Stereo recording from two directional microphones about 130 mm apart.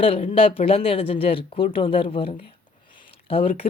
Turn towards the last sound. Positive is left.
turn(degrees=45)  # may be behind; listen again after turning